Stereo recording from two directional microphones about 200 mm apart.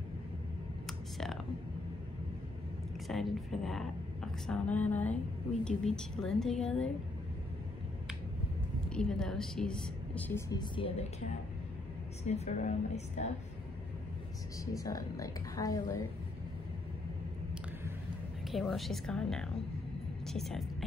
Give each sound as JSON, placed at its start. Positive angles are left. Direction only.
{"t": 0.8, "sound": "computer keyboard", "side_deg": 0}
{"t": 3.1, "sound": "a woman's voice", "side_deg": 0}
{"t": 8.9, "sound": "a woman's voice", "side_deg": 5}
{"t": 10.5, "sound": "speech", "side_deg": 25}
{"t": 12.3, "sound": "a woman's voice", "side_deg": 35}
{"t": 14.6, "sound": "a woman's voice", "side_deg": 15}
{"t": 18.5, "sound": "a woman's voice", "side_deg": 0}